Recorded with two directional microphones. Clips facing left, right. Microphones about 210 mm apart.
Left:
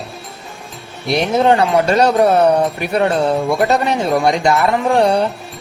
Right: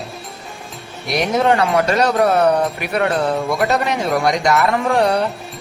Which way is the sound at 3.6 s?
30° left (ahead or behind).